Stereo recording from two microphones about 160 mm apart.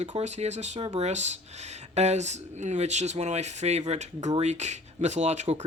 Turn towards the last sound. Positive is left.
turn(degrees=-45)  # may be behind; listen again after turning